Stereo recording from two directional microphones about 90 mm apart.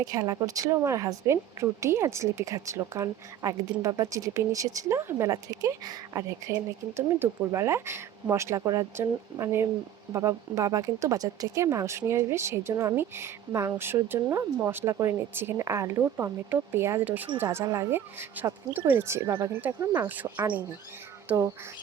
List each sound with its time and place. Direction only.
0.0 s speech: 45° right (ahead or behind)
6.9 s speech: 30° right (ahead or behind)
19.9 s speech: 20° right (ahead or behind)